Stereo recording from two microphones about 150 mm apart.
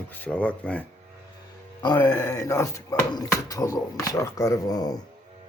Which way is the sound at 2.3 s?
25° left (ahead or behind).